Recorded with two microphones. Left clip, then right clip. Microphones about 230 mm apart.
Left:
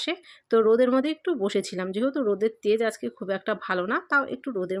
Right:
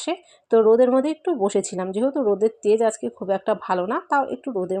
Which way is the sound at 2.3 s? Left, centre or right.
Centre.